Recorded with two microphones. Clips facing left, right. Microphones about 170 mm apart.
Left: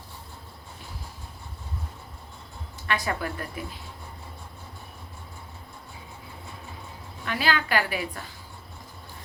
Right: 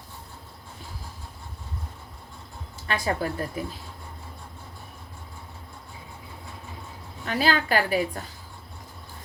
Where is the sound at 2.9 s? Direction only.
30° right (ahead or behind).